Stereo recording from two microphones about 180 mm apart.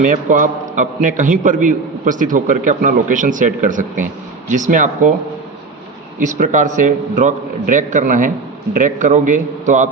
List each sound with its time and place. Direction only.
0.0 s a man's voice: 45° right (ahead or behind)
6.1 s a man's voice: 45° right (ahead or behind)